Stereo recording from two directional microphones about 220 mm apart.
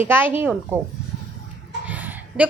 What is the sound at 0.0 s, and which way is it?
Speech, 10° right (ahead or behind).